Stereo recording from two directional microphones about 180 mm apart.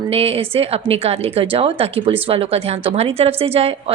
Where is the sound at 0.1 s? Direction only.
35° right (ahead or behind).